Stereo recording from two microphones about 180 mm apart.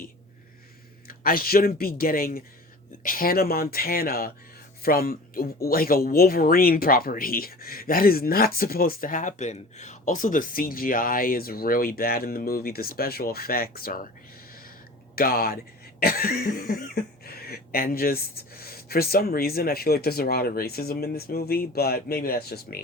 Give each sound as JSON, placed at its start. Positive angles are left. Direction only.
{"t": 1.0, "sound": "speech", "side_deg": 55}
{"t": 15.1, "sound": "speech", "side_deg": 55}